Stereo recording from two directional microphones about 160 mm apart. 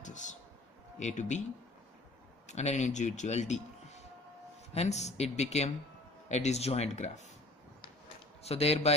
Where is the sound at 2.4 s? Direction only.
45° left (ahead or behind).